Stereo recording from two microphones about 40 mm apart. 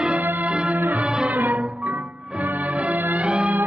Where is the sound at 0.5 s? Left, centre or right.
Right.